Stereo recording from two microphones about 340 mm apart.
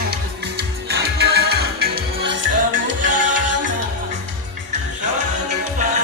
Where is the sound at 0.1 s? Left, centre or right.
Right.